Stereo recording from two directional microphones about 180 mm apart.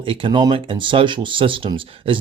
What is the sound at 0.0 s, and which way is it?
Speech, 30° right (ahead or behind).